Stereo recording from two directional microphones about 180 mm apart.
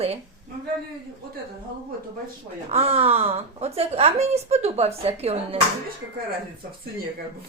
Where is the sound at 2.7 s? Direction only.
35° right (ahead or behind).